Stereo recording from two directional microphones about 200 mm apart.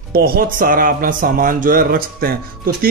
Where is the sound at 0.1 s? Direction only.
50° right (ahead or behind).